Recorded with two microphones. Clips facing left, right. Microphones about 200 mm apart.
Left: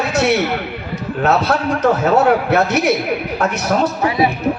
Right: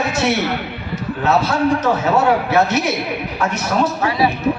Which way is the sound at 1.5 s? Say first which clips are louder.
Left 1 dB; 60° left (ahead or behind).